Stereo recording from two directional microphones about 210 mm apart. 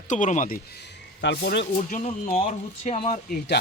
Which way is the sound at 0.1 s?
35° left (ahead or behind).